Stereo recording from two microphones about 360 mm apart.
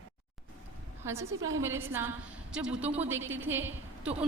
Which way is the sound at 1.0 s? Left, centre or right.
Centre.